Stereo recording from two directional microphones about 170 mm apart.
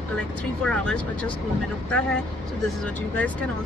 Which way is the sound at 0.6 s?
5° left (ahead or behind).